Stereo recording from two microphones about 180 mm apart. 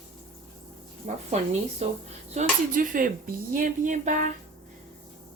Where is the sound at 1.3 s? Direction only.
40° right (ahead or behind).